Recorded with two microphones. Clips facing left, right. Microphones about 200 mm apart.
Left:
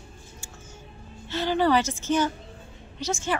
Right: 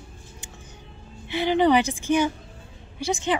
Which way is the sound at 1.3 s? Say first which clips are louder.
Right 3 dB; 15° right (ahead or behind).